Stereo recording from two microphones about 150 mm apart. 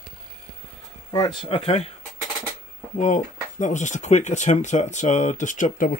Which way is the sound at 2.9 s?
55° left (ahead or behind).